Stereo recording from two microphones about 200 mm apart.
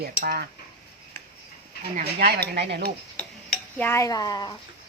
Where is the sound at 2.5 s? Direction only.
55° right (ahead or behind).